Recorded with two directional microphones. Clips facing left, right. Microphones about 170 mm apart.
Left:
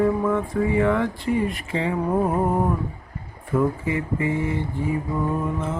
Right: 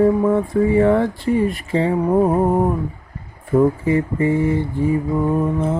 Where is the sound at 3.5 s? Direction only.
35° right (ahead or behind).